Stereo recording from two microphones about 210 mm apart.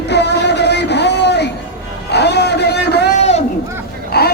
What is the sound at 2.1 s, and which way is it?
Vehicle, 55° left (ahead or behind).